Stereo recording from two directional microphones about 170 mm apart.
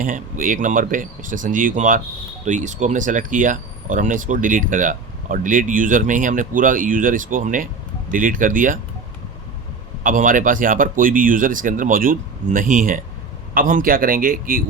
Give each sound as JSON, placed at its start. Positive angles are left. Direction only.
{"t": 0.0, "sound": "speech", "side_deg": -50}
{"t": 10.0, "sound": "a man's voice", "side_deg": -55}